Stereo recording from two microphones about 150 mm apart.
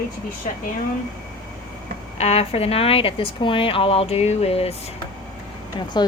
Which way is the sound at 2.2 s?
45° left (ahead or behind).